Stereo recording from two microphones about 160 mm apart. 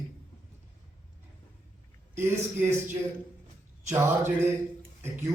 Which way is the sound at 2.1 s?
15° right (ahead or behind).